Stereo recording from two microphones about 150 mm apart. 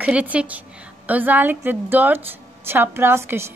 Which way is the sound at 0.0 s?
10° right (ahead or behind).